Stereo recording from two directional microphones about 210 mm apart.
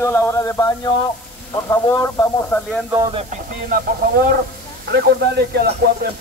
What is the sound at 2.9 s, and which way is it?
Speech, 15° right (ahead or behind).